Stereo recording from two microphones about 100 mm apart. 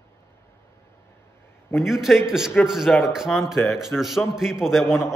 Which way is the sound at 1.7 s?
5° right (ahead or behind).